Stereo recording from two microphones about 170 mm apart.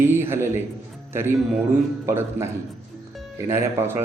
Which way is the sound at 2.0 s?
15° right (ahead or behind).